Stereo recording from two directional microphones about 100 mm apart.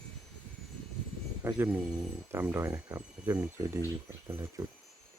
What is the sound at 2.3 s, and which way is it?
Speech, 25° right (ahead or behind).